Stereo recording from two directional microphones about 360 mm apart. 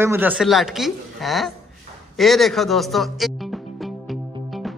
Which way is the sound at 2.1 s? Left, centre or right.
Centre.